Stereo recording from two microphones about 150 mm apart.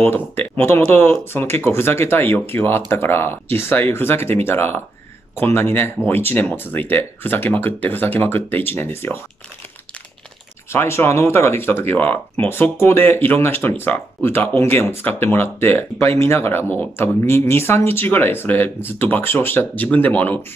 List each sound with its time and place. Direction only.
0.0 s speech: 15° left (ahead or behind)
10.7 s speech: 15° left (ahead or behind)